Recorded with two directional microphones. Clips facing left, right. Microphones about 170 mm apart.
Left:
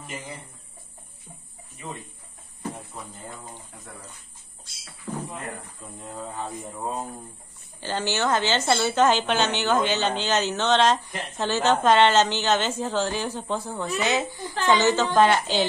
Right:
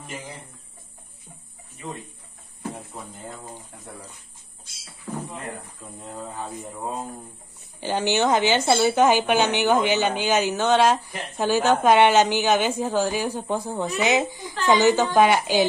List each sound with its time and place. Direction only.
3.5 s a woman's voice: 10° right (ahead or behind)
6.1 s speech: 5° right (ahead or behind)
7.8 s a woman's voice: 15° right (ahead or behind)